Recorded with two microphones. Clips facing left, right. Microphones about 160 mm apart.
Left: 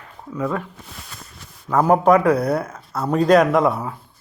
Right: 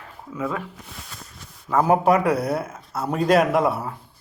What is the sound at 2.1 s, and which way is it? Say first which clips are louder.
Speech: left 4 dB; 55° left (ahead or behind).